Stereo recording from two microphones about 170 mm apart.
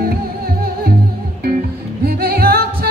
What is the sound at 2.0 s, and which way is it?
Music, 65° right (ahead or behind).